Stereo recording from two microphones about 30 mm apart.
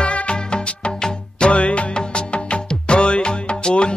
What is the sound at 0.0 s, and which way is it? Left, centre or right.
Music, left.